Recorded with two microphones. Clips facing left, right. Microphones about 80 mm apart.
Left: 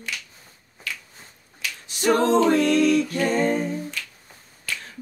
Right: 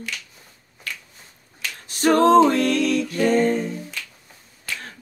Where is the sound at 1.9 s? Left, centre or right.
Right.